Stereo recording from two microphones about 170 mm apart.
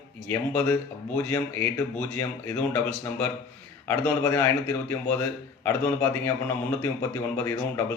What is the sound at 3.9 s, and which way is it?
A man's voice, 10° left (ahead or behind).